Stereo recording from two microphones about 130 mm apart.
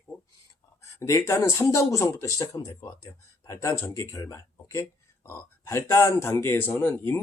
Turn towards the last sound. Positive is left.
turn(degrees=15)  # may be behind; listen again after turning